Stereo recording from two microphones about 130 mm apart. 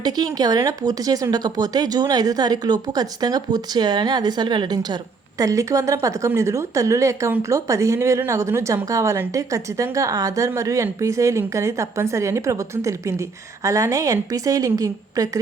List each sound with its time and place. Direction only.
0.0 s a woman's voice: 30° right (ahead or behind)